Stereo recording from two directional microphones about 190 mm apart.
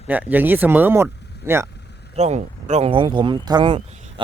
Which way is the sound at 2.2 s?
35° right (ahead or behind).